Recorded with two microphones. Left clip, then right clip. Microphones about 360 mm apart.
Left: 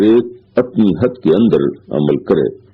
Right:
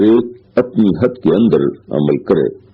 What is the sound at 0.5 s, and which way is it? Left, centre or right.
A man's voice, right.